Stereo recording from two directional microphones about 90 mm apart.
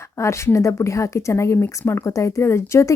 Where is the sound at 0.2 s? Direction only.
30° left (ahead or behind).